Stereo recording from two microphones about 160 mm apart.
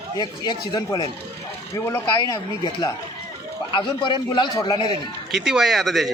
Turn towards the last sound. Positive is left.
turn(degrees=0)  # may be behind; listen again after turning